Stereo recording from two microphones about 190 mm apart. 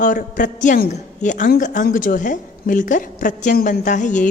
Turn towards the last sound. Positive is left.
turn(degrees=40)  # may be behind; listen again after turning